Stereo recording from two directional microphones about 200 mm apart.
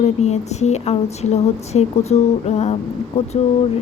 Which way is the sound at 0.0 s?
35° left (ahead or behind).